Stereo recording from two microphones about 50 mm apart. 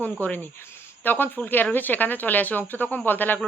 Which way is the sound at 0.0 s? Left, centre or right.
Left.